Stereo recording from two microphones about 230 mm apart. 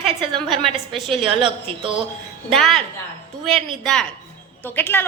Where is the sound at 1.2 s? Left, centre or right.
Right.